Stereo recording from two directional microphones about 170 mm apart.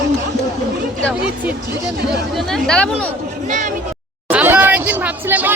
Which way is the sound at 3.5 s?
45° right (ahead or behind).